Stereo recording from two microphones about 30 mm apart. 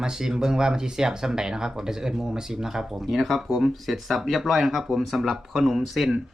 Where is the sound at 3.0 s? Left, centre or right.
Centre.